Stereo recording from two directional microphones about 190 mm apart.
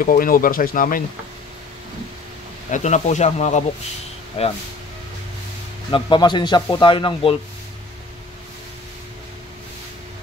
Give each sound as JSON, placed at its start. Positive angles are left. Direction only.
{"t": 0.0, "sound": "speech", "side_deg": 50}
{"t": 2.7, "sound": "speech", "side_deg": 40}
{"t": 5.9, "sound": "a man's voice", "side_deg": 25}